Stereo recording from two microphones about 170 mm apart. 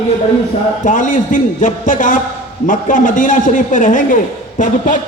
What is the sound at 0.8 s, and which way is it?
A man's voice, 50° left (ahead or behind).